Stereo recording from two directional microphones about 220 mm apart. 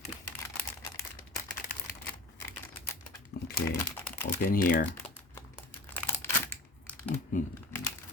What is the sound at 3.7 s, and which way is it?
Crumpling, 10° left (ahead or behind).